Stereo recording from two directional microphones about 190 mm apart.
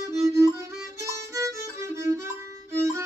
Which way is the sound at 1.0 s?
15° right (ahead or behind).